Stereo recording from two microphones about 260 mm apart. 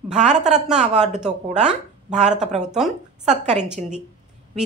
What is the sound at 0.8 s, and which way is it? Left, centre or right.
Speech, right.